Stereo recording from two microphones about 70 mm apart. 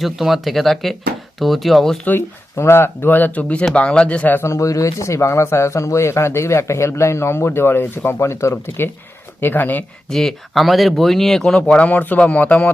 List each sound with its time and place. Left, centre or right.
0.0 s speech: centre
2.0 s speech: left; by 4.4 s centre
4.4 s speech: left
9.4 s speech: left
10.1 s speech: centre
11.6 s speech: centre